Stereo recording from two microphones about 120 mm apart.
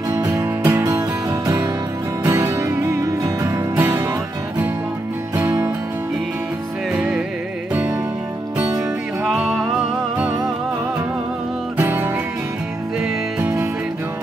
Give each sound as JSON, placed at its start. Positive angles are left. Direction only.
{"t": 0.4, "sound": "music", "side_deg": -15}
{"t": 2.2, "sound": "music", "side_deg": -25}
{"t": 6.9, "sound": "music", "side_deg": -5}
{"t": 9.2, "sound": "music", "side_deg": -5}
{"t": 11.7, "sound": "music", "side_deg": -15}